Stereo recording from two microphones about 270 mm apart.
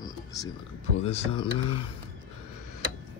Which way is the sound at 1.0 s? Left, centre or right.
Left.